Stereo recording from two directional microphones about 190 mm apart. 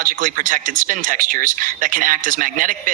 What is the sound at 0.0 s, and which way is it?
Speech, 45° right (ahead or behind).